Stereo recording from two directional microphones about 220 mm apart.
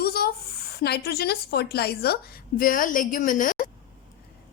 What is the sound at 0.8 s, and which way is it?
A woman's voice, 45° left (ahead or behind).